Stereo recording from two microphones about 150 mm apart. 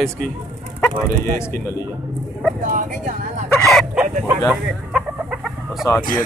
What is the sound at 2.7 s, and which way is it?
Speech, 60° right (ahead or behind).